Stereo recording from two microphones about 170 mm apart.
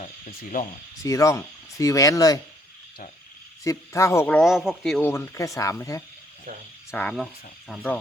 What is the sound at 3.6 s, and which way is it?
Speech, 15° left (ahead or behind).